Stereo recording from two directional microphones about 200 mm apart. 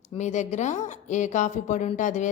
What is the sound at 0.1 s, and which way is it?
Speech, 35° left (ahead or behind).